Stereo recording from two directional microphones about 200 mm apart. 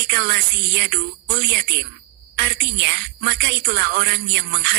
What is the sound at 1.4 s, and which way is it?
Speech, 55° right (ahead or behind).